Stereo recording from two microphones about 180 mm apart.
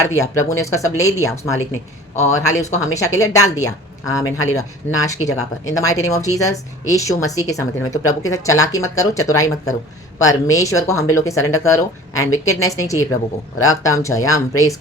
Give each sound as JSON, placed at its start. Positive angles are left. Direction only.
{"t": 0.1, "sound": "speech", "side_deg": 15}
{"t": 2.1, "sound": "speech", "side_deg": 40}
{"t": 2.8, "sound": "speech", "side_deg": 15}